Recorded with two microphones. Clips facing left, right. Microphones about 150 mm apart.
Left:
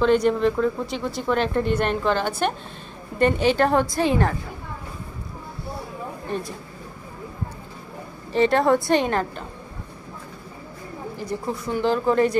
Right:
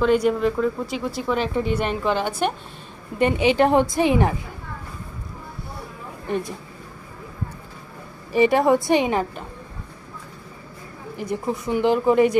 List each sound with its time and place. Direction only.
0.0 s a woman's voice: 5° right (ahead or behind)
8.3 s a woman's voice: 10° right (ahead or behind)
11.1 s a woman's voice: 15° right (ahead or behind)